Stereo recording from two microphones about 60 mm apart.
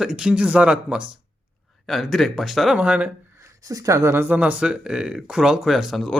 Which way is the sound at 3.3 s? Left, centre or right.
Right.